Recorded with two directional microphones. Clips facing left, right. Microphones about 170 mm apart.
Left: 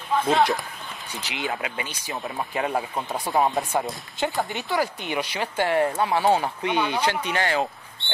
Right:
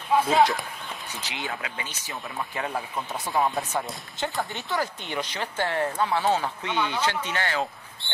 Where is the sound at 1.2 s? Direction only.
20° left (ahead or behind).